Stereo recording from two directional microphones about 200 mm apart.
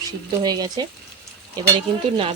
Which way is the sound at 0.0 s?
20° right (ahead or behind).